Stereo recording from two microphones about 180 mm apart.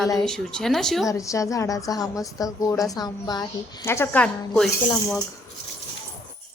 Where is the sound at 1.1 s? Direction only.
15° left (ahead or behind).